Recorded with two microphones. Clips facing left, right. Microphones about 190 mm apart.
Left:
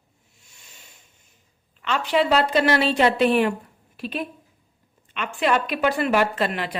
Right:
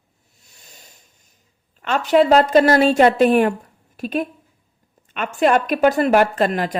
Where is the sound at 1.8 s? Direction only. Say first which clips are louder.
Right 6 dB; 45° right (ahead or behind).